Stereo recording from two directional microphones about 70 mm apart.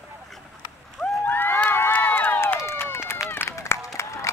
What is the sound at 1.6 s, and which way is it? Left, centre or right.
Run, left.